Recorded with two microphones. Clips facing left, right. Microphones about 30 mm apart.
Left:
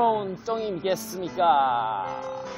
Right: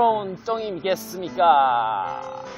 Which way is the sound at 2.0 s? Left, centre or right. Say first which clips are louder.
Right 2 dB; centre.